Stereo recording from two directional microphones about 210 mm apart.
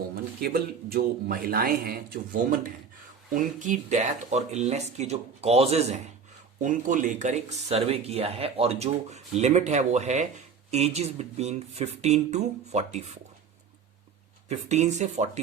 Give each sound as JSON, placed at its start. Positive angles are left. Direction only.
{"t": 0.4, "sound": "a man's voice", "side_deg": -45}
{"t": 14.5, "sound": "speech", "side_deg": -35}